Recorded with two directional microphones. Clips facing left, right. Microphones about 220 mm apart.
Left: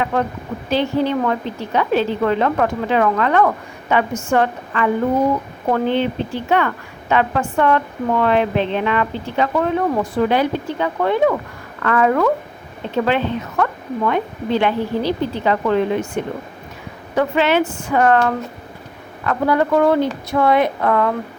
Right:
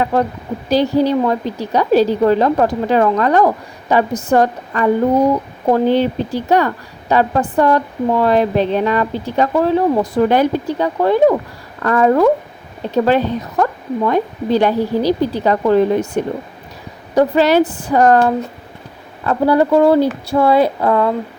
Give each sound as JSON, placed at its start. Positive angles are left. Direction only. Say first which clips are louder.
{"t": 0.0, "sound": "a woman's voice", "louder": "right 4 dB", "side_deg": -35}